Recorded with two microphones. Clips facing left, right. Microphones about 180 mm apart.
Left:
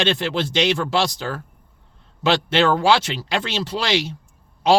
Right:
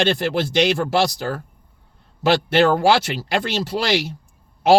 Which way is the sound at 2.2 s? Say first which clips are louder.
Right 2 dB; 45° right (ahead or behind).